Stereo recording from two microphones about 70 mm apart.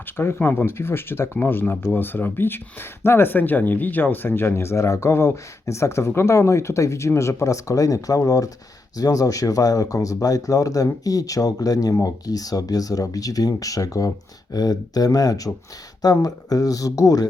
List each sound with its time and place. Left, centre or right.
0.2 s speech: left